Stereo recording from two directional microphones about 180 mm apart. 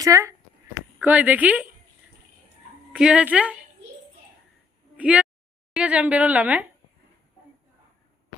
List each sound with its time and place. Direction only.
0.0 s a woman's voice: 15° right (ahead or behind)
2.9 s a woman's voice: 5° right (ahead or behind)
4.9 s a sound: 10° right (ahead or behind)
5.7 s a woman's voice: 5° right (ahead or behind)